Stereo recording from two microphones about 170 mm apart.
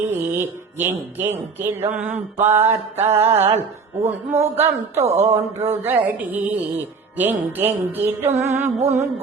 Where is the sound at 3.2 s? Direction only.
40° right (ahead or behind).